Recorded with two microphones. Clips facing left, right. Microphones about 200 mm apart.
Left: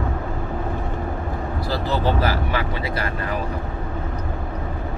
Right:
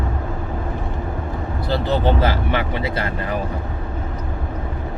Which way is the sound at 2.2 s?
25° right (ahead or behind).